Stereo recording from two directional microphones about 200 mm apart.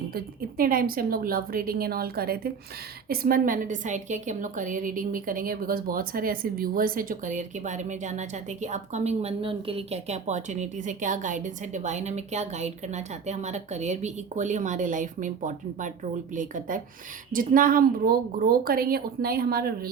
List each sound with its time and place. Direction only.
0.1 s a woman's voice: 45° right (ahead or behind)